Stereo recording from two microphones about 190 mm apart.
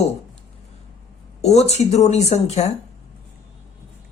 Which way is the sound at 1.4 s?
35° left (ahead or behind).